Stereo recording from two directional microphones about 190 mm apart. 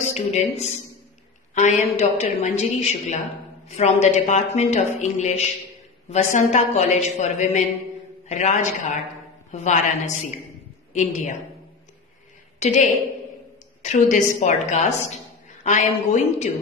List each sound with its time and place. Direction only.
0.1 s a woman's voice: 35° left (ahead or behind)
12.5 s a woman's voice: 35° left (ahead or behind)